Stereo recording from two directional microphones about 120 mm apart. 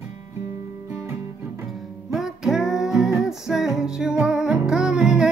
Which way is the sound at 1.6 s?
Centre (ahead or behind).